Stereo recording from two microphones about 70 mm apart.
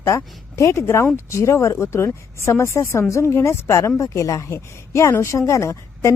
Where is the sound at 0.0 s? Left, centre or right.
Left.